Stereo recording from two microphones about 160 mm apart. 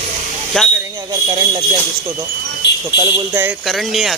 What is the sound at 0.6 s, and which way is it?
Speech, 5° left (ahead or behind).